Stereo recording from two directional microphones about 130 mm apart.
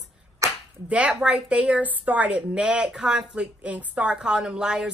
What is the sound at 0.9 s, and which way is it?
A woman's voice, 10° right (ahead or behind).